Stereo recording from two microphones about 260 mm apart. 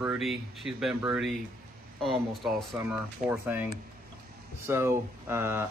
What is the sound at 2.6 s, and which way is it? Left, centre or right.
Speech, centre.